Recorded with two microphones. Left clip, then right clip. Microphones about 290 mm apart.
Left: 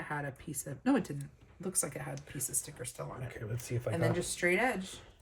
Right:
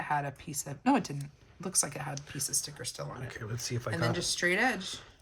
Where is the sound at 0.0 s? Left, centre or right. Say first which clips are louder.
Right 7 dB; right.